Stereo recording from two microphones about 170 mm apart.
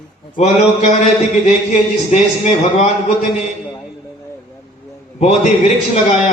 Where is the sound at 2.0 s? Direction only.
45° left (ahead or behind).